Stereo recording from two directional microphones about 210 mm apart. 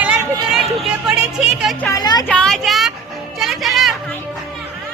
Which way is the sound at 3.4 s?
Centre (ahead or behind).